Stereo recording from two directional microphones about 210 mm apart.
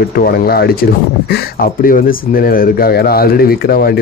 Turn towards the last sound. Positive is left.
turn(degrees=45)  # may be behind; listen again after turning